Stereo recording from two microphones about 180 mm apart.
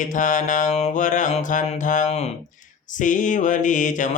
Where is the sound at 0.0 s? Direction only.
45° left (ahead or behind).